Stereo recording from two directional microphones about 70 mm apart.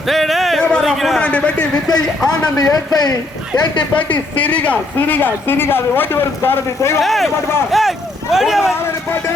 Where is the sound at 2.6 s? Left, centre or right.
Left.